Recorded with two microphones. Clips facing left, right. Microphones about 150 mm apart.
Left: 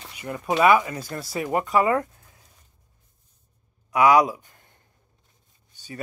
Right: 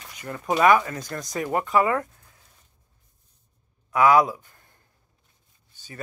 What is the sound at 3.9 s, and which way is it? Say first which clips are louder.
Speech: left 1 dB; 15° left (ahead or behind).